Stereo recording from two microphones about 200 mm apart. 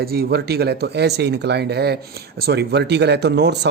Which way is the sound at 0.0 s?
50° right (ahead or behind).